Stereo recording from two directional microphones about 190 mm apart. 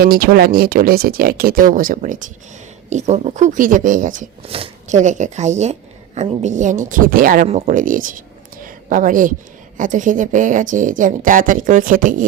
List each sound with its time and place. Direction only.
0.0 s a woman's voice: 50° right (ahead or behind)
4.4 s a woman's voice: 30° right (ahead or behind)